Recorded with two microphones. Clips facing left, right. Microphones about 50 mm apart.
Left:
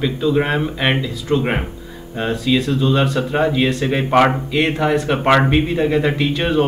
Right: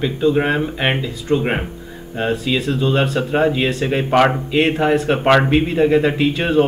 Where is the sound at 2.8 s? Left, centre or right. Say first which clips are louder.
Even; right.